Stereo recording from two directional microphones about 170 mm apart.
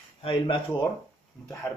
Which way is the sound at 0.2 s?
30° left (ahead or behind).